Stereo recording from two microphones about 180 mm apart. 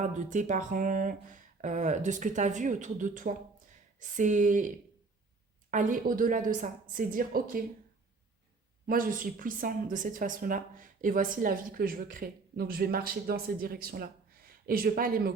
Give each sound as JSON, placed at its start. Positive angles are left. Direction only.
{"t": 0.0, "sound": "a woman's voice", "side_deg": -45}
{"t": 5.7, "sound": "a woman's voice", "side_deg": -50}
{"t": 8.9, "sound": "a woman's voice", "side_deg": -50}